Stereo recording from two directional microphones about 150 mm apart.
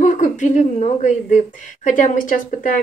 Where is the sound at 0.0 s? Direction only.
55° left (ahead or behind).